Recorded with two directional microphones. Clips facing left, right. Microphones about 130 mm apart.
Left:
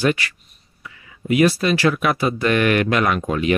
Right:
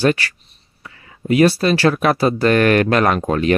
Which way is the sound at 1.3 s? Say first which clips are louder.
Right 3 dB; 30° right (ahead or behind).